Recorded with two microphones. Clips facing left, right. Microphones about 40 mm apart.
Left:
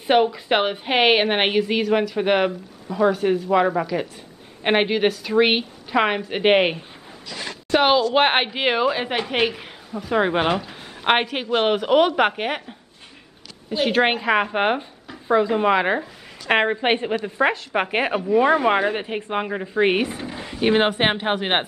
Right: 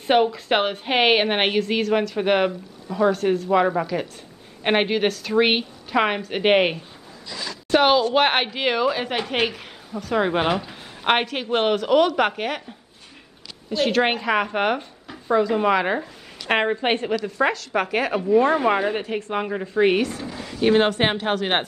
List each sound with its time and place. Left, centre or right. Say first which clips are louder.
0.0 s a woman's voice: left 1 dB; centre
10.7 s a sound: left 1 dB; centre
11.6 s speech: left 1 dB; centre
13.7 s speech: left 1 dB; centre
18.4 s speech: left 2 dB; centre